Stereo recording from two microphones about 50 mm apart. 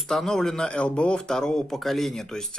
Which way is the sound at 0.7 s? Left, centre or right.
Left.